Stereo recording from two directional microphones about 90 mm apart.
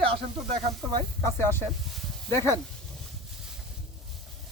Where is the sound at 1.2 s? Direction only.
25° left (ahead or behind).